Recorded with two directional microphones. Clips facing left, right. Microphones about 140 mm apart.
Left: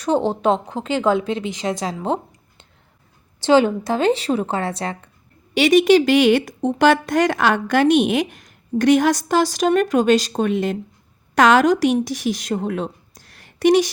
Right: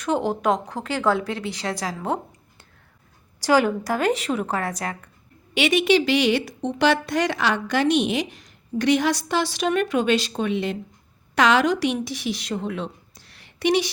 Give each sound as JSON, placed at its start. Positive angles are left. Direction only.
{"t": 0.0, "sound": "a woman's voice", "side_deg": 30}
{"t": 5.5, "sound": "a woman's voice", "side_deg": 40}